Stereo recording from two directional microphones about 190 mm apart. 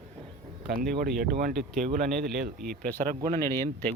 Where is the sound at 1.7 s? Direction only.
45° right (ahead or behind).